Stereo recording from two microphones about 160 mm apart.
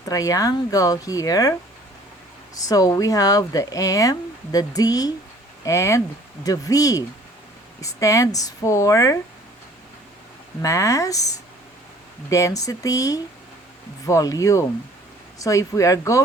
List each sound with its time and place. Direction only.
0.0 s speech: 20° left (ahead or behind)
2.6 s speech: 20° left (ahead or behind)
10.6 s speech: 20° left (ahead or behind)